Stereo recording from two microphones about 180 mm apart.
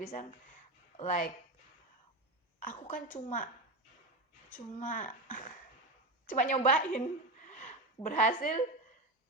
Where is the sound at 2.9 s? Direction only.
45° left (ahead or behind).